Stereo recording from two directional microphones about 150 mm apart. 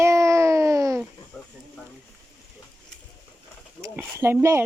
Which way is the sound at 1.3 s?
5° left (ahead or behind).